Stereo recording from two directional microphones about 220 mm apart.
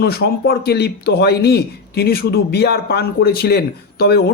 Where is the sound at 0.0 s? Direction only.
45° left (ahead or behind).